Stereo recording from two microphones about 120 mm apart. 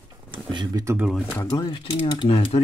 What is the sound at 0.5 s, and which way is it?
Speech, 30° right (ahead or behind).